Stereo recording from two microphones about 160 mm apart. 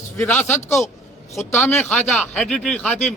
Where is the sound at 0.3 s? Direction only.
10° left (ahead or behind).